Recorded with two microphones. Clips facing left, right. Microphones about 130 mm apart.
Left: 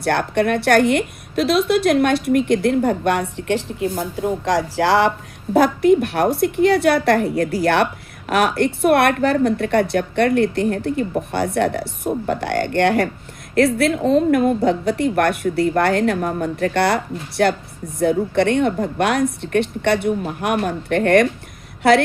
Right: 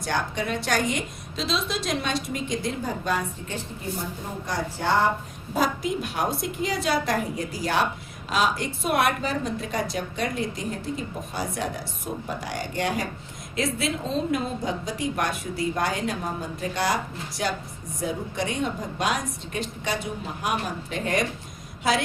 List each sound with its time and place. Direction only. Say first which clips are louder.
0.0 s a woman's voice: left 9 dB; 65° left (ahead or behind); by 5.1 s 90° left
5.5 s a woman's voice: left 12 dB; 60° left (ahead or behind)